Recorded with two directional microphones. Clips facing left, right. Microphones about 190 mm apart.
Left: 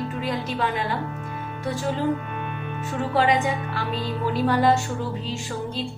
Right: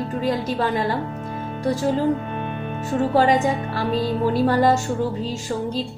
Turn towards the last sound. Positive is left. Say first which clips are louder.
# right 4 dB
turn(degrees=-40)  # may be behind; listen again after turning